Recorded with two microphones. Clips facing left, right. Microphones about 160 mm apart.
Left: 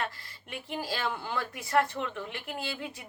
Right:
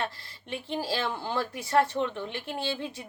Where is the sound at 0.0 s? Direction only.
30° right (ahead or behind).